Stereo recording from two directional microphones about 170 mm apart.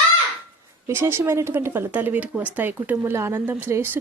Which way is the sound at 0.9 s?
15° right (ahead or behind).